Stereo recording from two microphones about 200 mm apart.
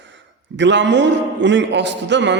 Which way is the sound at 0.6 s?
65° right (ahead or behind).